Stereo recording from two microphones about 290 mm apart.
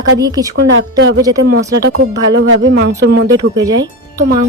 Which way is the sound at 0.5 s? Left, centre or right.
Right.